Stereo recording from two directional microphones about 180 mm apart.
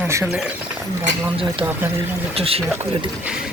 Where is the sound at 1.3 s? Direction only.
30° right (ahead or behind).